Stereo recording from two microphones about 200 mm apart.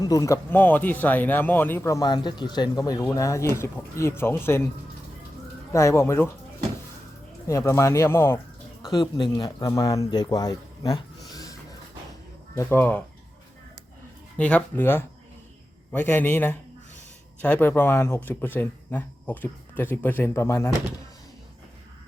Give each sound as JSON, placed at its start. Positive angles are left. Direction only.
{"t": 0.0, "sound": "speech", "side_deg": 15}
{"t": 5.7, "sound": "speech", "side_deg": 15}
{"t": 7.4, "sound": "speech", "side_deg": 15}
{"t": 8.8, "sound": "speech", "side_deg": 25}
{"t": 12.5, "sound": "speech", "side_deg": 10}
{"t": 14.3, "sound": "speech", "side_deg": 5}